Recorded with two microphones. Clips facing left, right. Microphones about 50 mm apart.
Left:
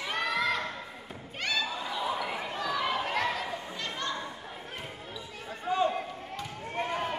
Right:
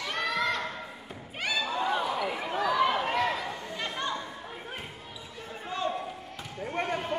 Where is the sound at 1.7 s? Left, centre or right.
Right.